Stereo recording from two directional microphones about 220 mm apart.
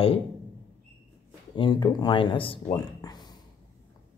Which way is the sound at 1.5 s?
20° left (ahead or behind).